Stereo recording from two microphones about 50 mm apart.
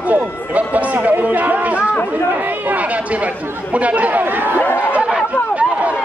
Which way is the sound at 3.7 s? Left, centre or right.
Right.